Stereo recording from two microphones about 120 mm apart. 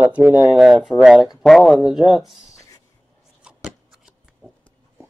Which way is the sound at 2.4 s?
25° left (ahead or behind).